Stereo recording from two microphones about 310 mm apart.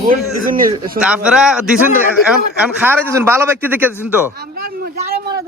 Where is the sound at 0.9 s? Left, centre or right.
Centre.